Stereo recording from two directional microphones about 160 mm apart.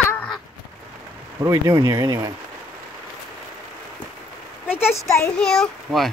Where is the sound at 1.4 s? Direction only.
20° right (ahead or behind).